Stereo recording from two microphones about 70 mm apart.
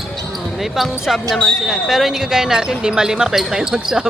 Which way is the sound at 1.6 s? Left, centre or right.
Centre.